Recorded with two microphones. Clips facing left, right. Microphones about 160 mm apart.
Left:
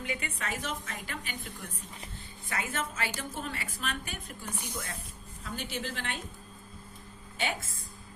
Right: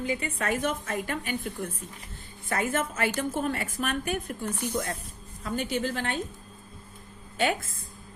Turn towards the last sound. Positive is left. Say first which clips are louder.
# right 7 dB
turn(degrees=-55)  # may be behind; listen again after turning